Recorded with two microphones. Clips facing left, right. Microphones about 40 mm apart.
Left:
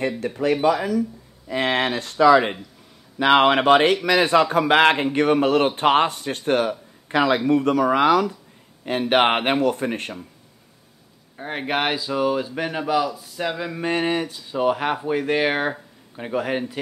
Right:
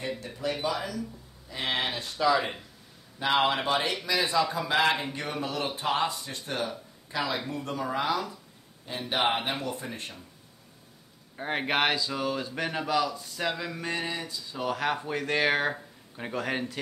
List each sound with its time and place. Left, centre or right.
0.2 s speech: left
1.5 s speech: left
11.3 s speech: centre
11.9 s speech: centre
13.6 s speech: centre
13.8 s speech: left
14.5 s speech: left